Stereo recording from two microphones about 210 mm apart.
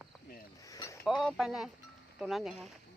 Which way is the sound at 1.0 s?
Centre (ahead or behind).